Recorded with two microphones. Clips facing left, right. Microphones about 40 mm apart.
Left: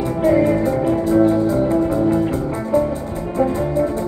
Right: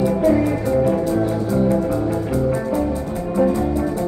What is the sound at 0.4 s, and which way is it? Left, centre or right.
Music, centre.